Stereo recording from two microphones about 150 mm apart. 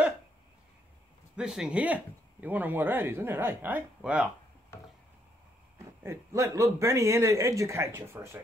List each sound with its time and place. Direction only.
1.3 s speech: 5° right (ahead or behind)
6.0 s a man's voice: 20° right (ahead or behind)